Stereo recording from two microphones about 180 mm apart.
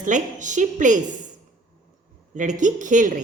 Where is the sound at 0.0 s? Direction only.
45° right (ahead or behind).